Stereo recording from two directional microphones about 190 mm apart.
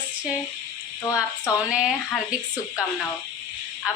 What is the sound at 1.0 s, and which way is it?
Speech, 15° left (ahead or behind).